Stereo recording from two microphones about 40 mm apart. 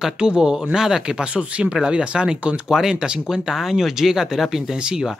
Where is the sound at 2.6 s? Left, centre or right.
Centre.